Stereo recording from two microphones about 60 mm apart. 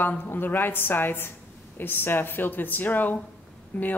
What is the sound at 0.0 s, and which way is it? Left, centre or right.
Speech, left.